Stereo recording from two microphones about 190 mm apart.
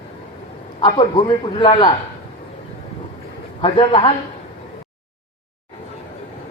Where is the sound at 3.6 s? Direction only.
30° left (ahead or behind).